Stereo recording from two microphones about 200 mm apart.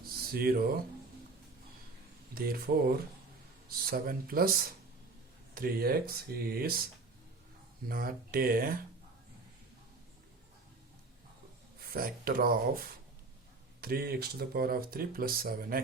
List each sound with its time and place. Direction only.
0.3 s speech: 50° right (ahead or behind)
2.3 s speech: 50° right (ahead or behind)
7.9 s speech: 45° right (ahead or behind)
11.9 s speech: 45° right (ahead or behind)
13.8 s speech: 50° right (ahead or behind)